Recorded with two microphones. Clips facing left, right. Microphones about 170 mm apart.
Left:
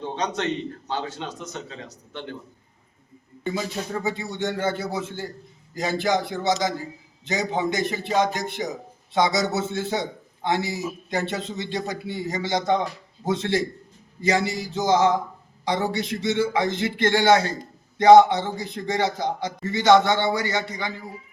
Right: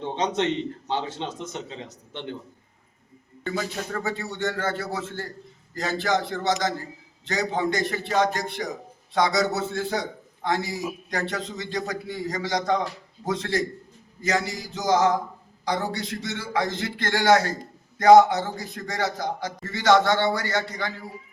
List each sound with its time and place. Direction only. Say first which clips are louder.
0.0 s a man's voice: right 2 dB; 25° right (ahead or behind)
3.4 s a man's voice: left 1 dB; 10° left (ahead or behind)